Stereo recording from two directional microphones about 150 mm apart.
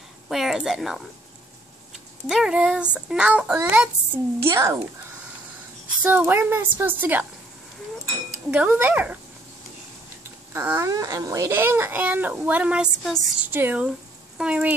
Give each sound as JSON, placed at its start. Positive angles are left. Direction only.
{"t": 0.3, "sound": "a woman's voice", "side_deg": 0}
{"t": 2.2, "sound": "speech", "side_deg": -5}
{"t": 6.0, "sound": "speech", "side_deg": -10}
{"t": 8.5, "sound": "speech", "side_deg": -10}
{"t": 10.5, "sound": "speech", "side_deg": -15}
{"t": 13.5, "sound": "speech", "side_deg": -10}